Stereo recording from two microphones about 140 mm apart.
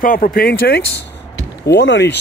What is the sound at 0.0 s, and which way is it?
Speech, 85° left.